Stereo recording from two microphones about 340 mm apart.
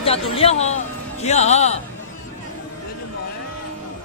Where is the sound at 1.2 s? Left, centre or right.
Centre.